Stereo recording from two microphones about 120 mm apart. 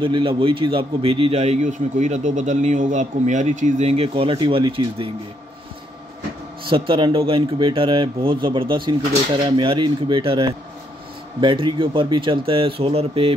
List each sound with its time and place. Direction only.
0.0 s a man's voice: 45° right (ahead or behind)
6.7 s speech: 45° right (ahead or behind)